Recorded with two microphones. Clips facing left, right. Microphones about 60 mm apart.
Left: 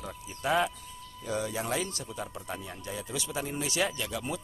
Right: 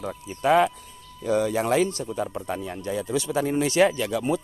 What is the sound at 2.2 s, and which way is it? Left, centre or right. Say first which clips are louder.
Speech: right 8 dB; right.